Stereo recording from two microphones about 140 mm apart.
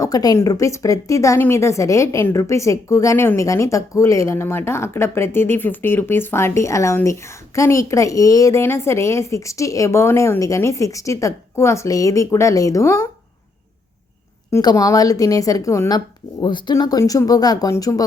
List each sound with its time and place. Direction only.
0.0 s a woman's voice: 25° left (ahead or behind)
14.5 s a woman's voice: 25° left (ahead or behind)
16.4 s a woman's voice: 35° left (ahead or behind)